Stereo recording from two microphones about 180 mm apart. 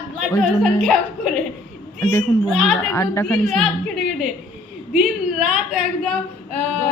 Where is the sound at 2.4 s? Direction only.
Centre (ahead or behind).